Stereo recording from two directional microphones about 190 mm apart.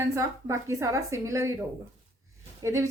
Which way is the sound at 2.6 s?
15° right (ahead or behind).